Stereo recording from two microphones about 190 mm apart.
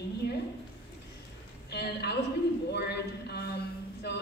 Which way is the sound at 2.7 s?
60° left (ahead or behind).